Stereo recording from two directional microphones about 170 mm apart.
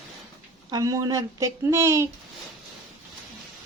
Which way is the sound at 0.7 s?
20° right (ahead or behind).